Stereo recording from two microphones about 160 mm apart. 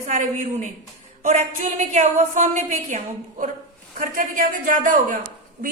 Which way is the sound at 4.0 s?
60° right (ahead or behind).